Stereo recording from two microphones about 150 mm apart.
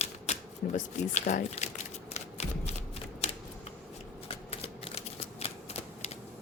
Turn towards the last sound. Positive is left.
turn(degrees=45)  # may be behind; listen again after turning